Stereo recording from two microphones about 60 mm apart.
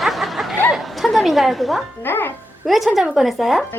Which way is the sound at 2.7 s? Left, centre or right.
Centre.